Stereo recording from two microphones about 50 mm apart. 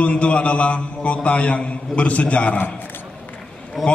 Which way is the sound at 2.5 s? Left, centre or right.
Left.